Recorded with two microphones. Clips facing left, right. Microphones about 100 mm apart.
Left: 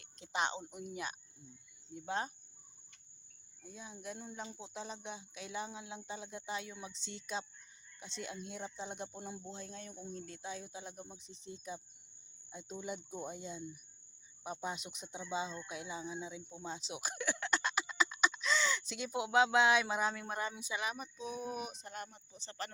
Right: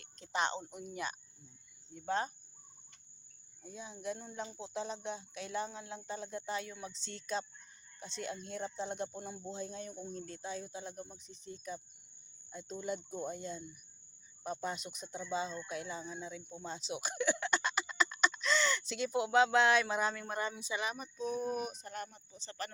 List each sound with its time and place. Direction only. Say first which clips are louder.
0.0 s speech: right 1 dB; 10° left (ahead or behind)
3.6 s speech: right 4 dB; centre (ahead or behind)
11.0 s speech: right 1 dB; 20° left (ahead or behind)